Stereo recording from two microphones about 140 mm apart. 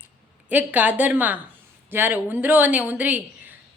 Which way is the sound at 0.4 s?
10° right (ahead or behind).